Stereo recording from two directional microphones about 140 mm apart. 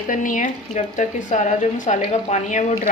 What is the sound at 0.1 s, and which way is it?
A woman's voice, 70° left (ahead or behind).